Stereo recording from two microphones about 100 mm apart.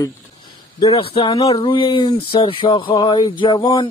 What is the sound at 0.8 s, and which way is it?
Speech, 70° left (ahead or behind).